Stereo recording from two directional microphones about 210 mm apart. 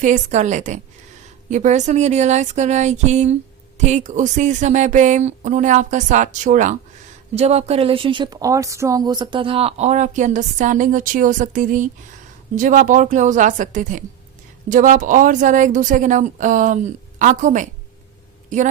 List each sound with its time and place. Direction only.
0.0 s a woman's voice: 35° right (ahead or behind)